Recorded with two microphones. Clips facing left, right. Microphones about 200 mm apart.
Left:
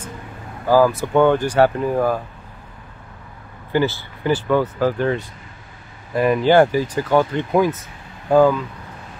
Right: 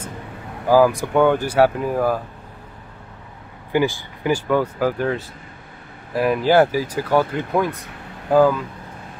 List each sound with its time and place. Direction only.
0.7 s speech: 15° right (ahead or behind)
3.7 s speech: 15° right (ahead or behind)